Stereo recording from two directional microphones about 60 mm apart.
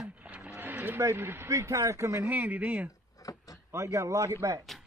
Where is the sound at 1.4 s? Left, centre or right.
Right.